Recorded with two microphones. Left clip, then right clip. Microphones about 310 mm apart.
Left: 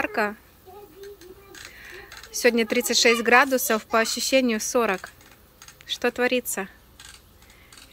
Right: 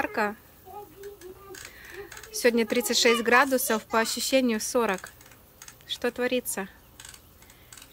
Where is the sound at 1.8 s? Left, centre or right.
Centre.